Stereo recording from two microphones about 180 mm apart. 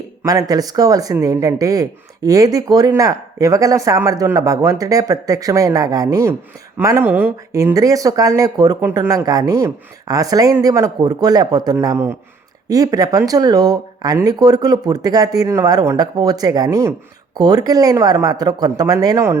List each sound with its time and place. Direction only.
0.2 s speech: 20° right (ahead or behind)